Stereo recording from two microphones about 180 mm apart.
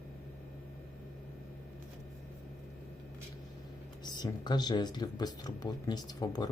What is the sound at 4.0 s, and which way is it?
Speech, 25° left (ahead or behind).